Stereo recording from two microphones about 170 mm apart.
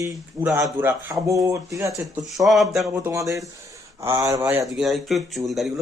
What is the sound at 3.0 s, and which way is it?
Speech, 20° right (ahead or behind).